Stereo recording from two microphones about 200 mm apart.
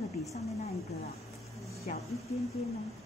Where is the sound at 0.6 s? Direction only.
30° left (ahead or behind).